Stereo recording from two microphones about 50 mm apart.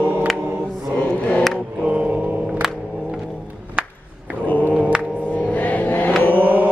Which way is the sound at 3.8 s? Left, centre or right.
Centre.